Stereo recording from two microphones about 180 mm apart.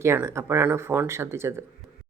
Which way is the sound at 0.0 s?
15° right (ahead or behind).